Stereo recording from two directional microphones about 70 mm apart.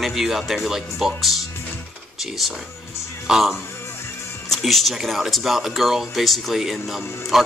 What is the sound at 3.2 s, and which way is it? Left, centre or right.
Speech, centre.